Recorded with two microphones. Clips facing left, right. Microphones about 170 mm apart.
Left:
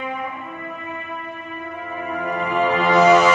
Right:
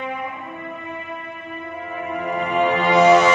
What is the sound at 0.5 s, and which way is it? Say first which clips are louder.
Music: even; 25° right (ahead or behind).